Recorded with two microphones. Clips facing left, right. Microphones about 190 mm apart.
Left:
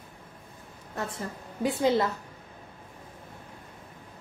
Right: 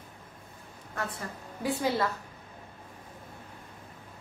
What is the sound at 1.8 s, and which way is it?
Speech, 20° left (ahead or behind).